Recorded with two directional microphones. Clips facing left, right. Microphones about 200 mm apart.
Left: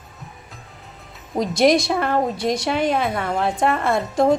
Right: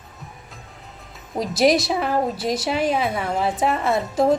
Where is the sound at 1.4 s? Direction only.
5° right (ahead or behind).